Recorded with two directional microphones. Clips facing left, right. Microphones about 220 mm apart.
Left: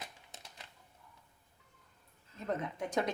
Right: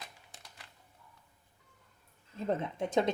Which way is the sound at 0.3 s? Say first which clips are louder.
Left 2 dB; 20° left (ahead or behind).